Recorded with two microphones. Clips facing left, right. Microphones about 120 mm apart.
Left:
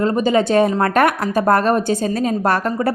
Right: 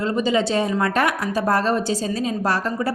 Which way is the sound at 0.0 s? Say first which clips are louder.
Left 4 dB; 45° left (ahead or behind).